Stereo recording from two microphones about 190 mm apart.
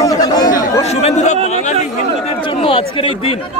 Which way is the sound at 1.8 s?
30° left (ahead or behind).